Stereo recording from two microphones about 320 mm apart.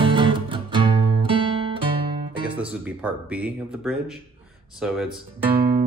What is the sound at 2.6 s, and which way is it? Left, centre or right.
Speech, centre.